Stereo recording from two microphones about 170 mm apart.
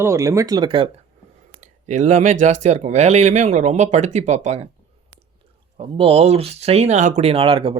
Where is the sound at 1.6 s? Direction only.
45° right (ahead or behind).